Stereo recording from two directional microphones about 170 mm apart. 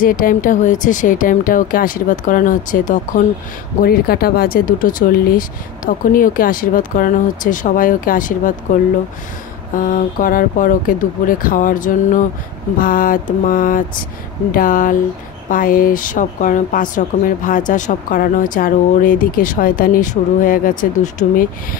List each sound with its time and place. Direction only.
0.0 s speech: 55° left (ahead or behind)
3.8 s speech: 65° left (ahead or behind)
9.8 s speech: 50° left (ahead or behind)